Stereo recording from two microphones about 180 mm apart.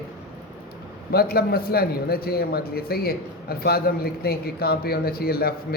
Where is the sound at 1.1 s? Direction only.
60° left (ahead or behind).